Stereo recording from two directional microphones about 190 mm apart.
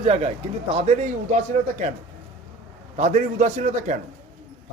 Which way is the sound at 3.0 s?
40° right (ahead or behind).